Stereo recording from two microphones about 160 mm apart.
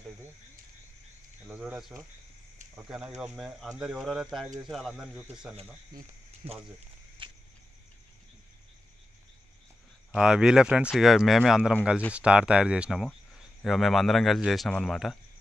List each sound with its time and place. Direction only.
1.5 s speech: 10° right (ahead or behind)
6.4 s speech: 35° right (ahead or behind)
7.2 s a sound: 30° right (ahead or behind)
10.1 s speech: 5° right (ahead or behind)